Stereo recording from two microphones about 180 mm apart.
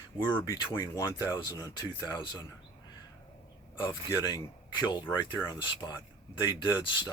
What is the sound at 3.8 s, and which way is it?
Speech, 25° left (ahead or behind).